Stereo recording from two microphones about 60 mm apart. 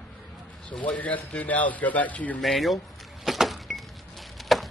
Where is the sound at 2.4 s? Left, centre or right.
Centre.